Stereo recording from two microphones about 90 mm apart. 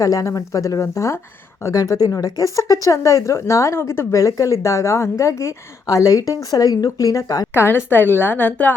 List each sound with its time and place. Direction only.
0.0 s speech: 40° left (ahead or behind)
7.5 s a woman's voice: 25° left (ahead or behind)